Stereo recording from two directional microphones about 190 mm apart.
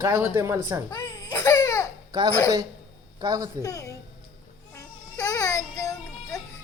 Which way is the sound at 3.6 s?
15° left (ahead or behind).